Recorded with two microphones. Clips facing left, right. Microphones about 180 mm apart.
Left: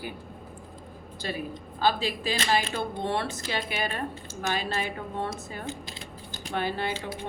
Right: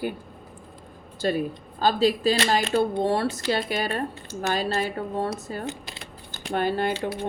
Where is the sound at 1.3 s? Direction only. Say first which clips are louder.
Right 6 dB; 40° right (ahead or behind).